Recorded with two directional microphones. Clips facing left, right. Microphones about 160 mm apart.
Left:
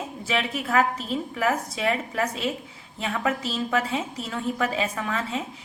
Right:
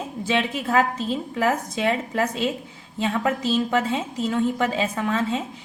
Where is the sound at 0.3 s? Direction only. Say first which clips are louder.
Right 2 dB; 25° right (ahead or behind).